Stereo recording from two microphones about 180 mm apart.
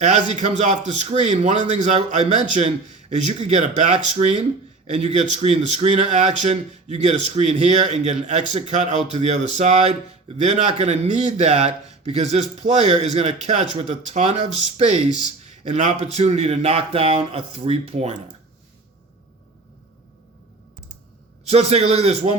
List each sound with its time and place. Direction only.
0.3 s speech: 40° right (ahead or behind)
21.4 s speech: 35° right (ahead or behind)